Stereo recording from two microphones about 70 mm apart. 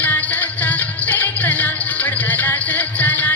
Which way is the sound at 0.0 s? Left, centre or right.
Left.